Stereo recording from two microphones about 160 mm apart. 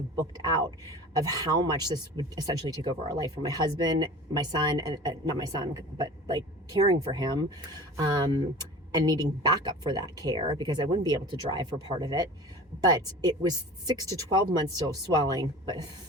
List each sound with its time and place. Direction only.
0.2 s speech: 25° right (ahead or behind)